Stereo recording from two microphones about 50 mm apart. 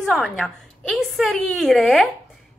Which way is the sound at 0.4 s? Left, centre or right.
Centre.